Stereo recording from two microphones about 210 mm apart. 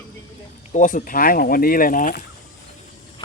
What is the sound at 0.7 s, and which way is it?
Speech, 40° left (ahead or behind).